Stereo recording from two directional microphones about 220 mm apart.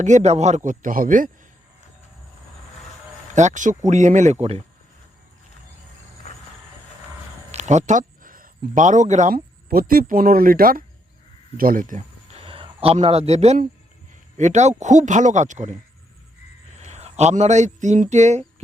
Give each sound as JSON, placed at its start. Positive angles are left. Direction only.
{"t": 0.0, "sound": "speech", "side_deg": -30}
{"t": 3.3, "sound": "speech", "side_deg": -35}
{"t": 7.5, "sound": "speech", "side_deg": -30}
{"t": 16.7, "sound": "speech", "side_deg": -30}